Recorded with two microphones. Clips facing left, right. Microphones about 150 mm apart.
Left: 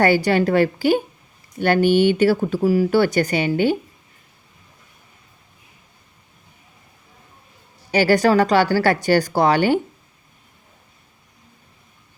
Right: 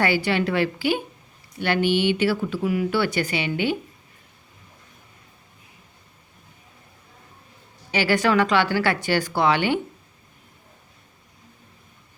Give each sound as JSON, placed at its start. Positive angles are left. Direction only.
{"t": 0.0, "sound": "speech", "side_deg": 45}
{"t": 7.9, "sound": "speech", "side_deg": 40}